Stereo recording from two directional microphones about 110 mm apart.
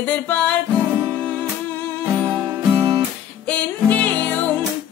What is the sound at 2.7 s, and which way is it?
Guitar, 30° right (ahead or behind).